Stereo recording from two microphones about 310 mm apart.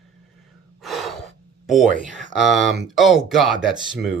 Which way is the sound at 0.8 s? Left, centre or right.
Centre.